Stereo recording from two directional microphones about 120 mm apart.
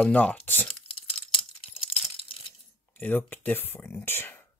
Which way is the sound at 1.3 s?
50° left (ahead or behind).